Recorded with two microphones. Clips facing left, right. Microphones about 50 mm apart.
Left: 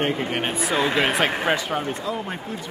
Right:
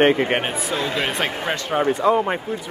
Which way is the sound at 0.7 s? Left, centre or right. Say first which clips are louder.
Left 3 dB; centre.